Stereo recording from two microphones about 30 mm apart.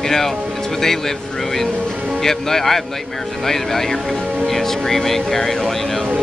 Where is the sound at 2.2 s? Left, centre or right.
Centre.